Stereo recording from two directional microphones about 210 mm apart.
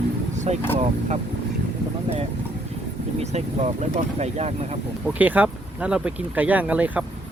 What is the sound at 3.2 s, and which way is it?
Speech, 30° right (ahead or behind).